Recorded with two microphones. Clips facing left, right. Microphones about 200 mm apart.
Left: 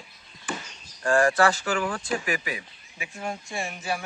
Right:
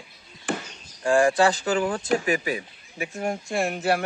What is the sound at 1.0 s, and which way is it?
Speech, 15° right (ahead or behind).